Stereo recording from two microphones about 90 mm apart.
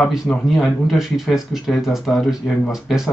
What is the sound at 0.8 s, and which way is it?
Speech, 5° right (ahead or behind).